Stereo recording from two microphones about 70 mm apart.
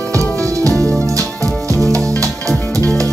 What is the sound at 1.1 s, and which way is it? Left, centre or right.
Music, right.